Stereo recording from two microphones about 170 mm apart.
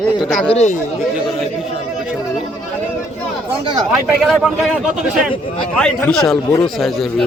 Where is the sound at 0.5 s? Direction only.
45° left (ahead or behind).